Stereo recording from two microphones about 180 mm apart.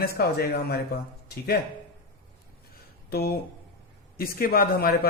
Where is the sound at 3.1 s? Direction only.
60° left (ahead or behind).